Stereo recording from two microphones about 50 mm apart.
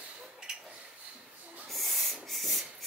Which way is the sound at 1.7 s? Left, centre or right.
Centre.